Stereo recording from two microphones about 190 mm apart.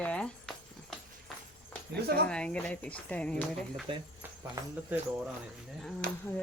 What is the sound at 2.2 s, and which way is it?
Speech, 5° left (ahead or behind).